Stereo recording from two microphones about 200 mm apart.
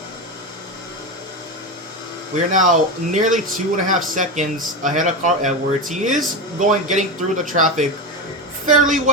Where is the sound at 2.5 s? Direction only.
40° right (ahead or behind).